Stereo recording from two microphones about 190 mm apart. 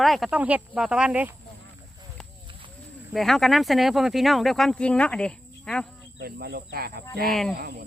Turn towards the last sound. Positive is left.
turn(degrees=-55)  # may be behind; listen again after turning